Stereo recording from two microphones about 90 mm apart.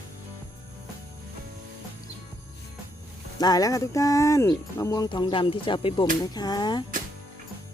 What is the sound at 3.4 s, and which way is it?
Speech, 45° left (ahead or behind).